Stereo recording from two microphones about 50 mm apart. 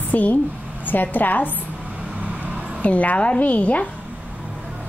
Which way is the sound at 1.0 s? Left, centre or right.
Left.